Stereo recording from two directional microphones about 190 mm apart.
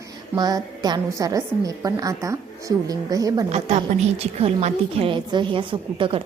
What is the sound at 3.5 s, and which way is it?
A woman's voice, 35° right (ahead or behind).